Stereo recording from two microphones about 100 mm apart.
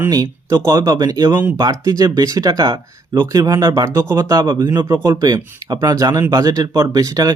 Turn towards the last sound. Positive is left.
turn(degrees=-35)  # may be behind; listen again after turning